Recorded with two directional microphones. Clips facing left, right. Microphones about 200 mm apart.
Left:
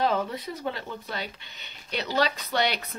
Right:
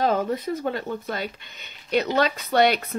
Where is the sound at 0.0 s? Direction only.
45° right (ahead or behind).